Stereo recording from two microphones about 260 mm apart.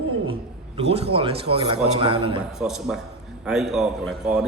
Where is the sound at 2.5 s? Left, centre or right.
Centre.